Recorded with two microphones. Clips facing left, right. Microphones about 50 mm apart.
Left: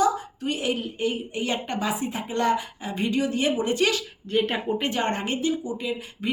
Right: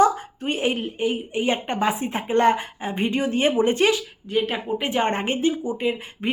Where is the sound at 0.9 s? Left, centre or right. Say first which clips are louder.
Right 3 dB; right.